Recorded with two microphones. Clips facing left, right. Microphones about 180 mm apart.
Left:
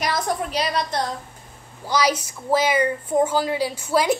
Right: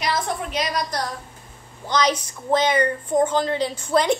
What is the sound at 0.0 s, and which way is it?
A woman's voice, 40° left (ahead or behind).